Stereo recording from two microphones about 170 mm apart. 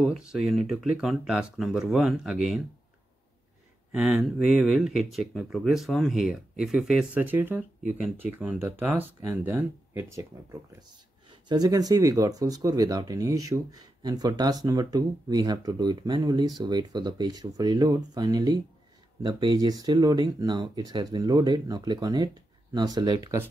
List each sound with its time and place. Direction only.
0.0 s speech: 5° right (ahead or behind)
3.9 s speech: centre (ahead or behind)